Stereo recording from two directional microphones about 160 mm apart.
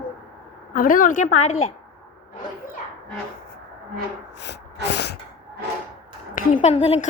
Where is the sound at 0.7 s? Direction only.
60° left (ahead or behind).